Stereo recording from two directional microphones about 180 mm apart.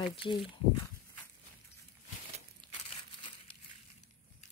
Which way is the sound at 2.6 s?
25° right (ahead or behind).